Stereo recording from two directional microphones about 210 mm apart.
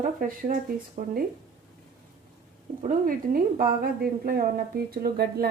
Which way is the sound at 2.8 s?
40° right (ahead or behind).